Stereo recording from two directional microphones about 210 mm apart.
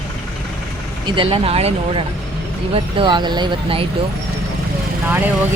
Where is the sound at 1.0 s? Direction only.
25° right (ahead or behind).